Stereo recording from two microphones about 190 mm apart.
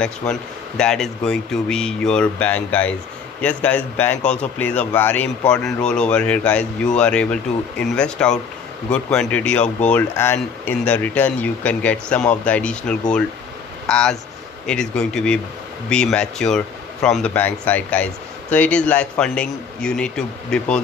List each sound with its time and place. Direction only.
0.0 s speech: 5° left (ahead or behind)
4.2 s speech: 40° left (ahead or behind)
4.6 s speech: 10° left (ahead or behind)
9.6 s speech: 40° left (ahead or behind)
9.9 s speech: 10° left (ahead or behind)